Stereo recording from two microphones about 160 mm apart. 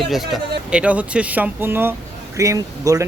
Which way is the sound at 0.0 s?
Centre (ahead or behind).